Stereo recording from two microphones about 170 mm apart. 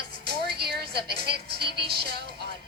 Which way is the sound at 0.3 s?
70° right (ahead or behind).